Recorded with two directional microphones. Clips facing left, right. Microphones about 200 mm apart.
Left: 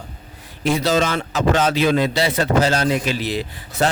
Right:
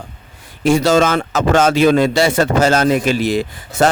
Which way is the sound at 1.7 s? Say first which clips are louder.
Right 6 dB; 50° right (ahead or behind).